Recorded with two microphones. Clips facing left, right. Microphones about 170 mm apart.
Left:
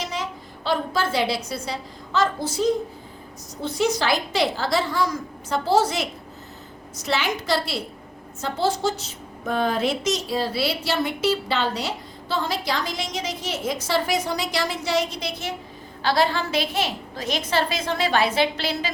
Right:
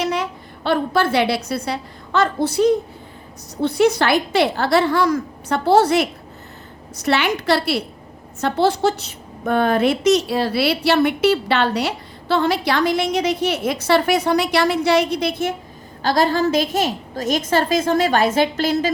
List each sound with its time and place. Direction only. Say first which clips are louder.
0.0 s a woman's voice: right 8 dB; 65° right (ahead or behind)
16.0 s a woman's voice: right 5 dB; 45° right (ahead or behind)